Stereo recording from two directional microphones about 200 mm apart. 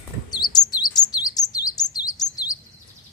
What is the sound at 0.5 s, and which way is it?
Chirp, 20° left (ahead or behind).